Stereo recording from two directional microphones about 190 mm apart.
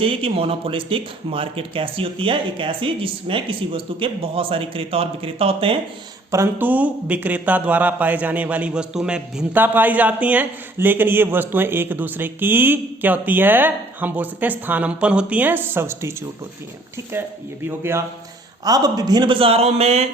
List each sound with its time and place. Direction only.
0.0 s speech: 30° right (ahead or behind)
6.3 s speech: 10° right (ahead or behind); by 20.1 s 35° right (ahead or behind)